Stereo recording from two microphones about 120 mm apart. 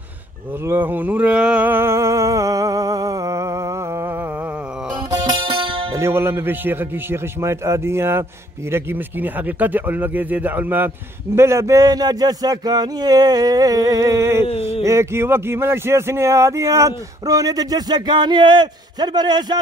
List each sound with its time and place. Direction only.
0.7 s a sound: 15° right (ahead or behind)
5.1 s music: 40° right (ahead or behind)
5.9 s a man's voice: 20° right (ahead or behind); by 19.6 s 35° right (ahead or behind)